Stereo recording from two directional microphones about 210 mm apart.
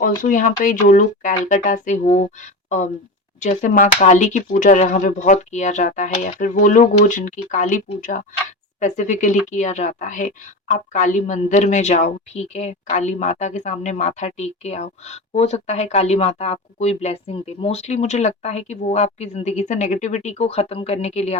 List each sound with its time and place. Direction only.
0.0 s a woman's voice: 40° left (ahead or behind)